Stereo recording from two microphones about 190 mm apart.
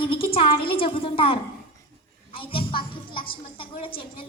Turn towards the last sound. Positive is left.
turn(degrees=30)  # may be behind; listen again after turning